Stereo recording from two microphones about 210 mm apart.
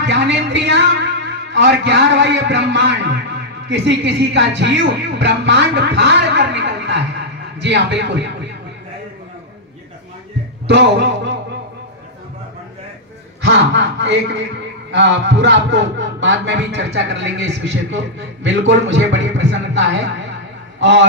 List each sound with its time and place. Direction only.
0.1 s a man's voice: 55° right (ahead or behind)
10.7 s a man's voice: 55° right (ahead or behind)
13.4 s a man's voice: 55° right (ahead or behind)